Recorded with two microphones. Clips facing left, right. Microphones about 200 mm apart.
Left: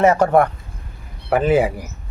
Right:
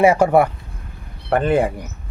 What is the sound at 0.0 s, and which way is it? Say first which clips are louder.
Speech: right 1 dB; 10° right (ahead or behind).